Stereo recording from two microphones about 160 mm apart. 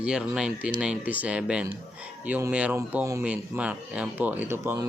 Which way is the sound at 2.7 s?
20° right (ahead or behind).